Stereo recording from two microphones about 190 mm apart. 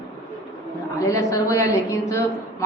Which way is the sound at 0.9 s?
15° left (ahead or behind).